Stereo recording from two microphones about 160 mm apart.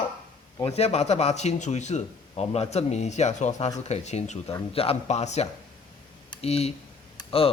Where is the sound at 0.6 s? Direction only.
40° left (ahead or behind).